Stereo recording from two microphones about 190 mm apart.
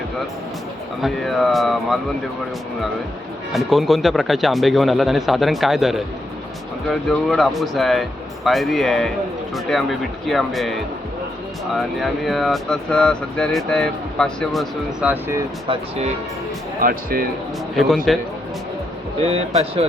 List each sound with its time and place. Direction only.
1.0 s speech: centre (ahead or behind)
3.5 s speech: centre (ahead or behind)
7.1 s speech: centre (ahead or behind)
10.2 s speech: centre (ahead or behind)
15.6 s speech: 30° right (ahead or behind)
16.8 s speech: 50° right (ahead or behind)
17.7 s speech: centre (ahead or behind)
19.2 s speech: 30° right (ahead or behind)